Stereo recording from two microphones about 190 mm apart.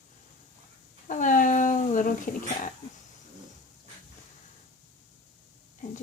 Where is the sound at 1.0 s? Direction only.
40° left (ahead or behind).